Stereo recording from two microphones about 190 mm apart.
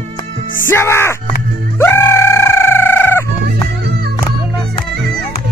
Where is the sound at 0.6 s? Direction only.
15° left (ahead or behind).